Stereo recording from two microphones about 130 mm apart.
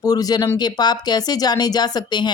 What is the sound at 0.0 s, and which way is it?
A woman's voice, 30° left (ahead or behind).